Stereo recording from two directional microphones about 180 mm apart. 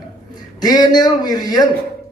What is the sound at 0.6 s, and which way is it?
A man's voice, 20° left (ahead or behind).